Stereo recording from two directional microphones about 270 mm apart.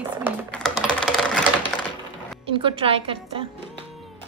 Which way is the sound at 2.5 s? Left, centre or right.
Centre.